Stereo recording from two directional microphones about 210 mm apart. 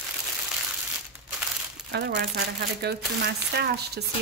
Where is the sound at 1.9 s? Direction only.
50° right (ahead or behind).